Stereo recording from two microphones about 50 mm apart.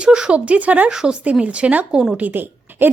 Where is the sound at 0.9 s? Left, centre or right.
Centre.